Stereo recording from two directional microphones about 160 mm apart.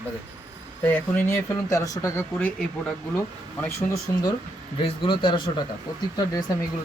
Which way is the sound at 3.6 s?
20° left (ahead or behind).